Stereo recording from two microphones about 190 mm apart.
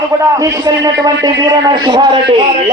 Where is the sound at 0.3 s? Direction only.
15° right (ahead or behind).